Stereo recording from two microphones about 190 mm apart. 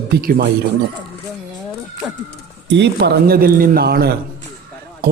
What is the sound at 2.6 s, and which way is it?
A man's voice, 65° right (ahead or behind).